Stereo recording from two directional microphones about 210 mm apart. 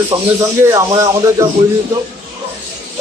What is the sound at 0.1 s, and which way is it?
Speech, 20° right (ahead or behind).